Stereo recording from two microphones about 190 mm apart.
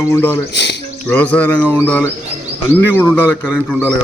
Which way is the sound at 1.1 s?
10° left (ahead or behind).